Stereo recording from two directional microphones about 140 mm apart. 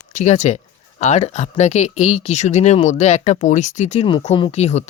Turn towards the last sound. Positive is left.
turn(degrees=50)  # may be behind; listen again after turning